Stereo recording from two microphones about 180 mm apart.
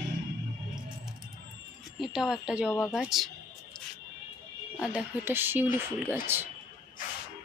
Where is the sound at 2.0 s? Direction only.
Centre (ahead or behind).